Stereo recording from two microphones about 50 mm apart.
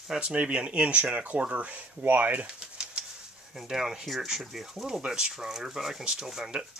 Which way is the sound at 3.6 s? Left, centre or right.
Centre.